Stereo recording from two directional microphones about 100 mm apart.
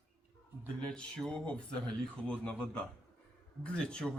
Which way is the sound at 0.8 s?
10° left (ahead or behind).